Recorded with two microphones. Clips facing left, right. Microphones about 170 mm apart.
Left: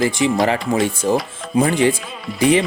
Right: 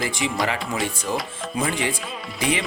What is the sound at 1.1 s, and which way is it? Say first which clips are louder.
Speech: left 9 dB; 35° left (ahead or behind).